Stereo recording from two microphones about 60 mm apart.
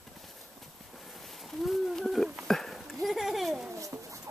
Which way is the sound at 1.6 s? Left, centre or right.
Centre.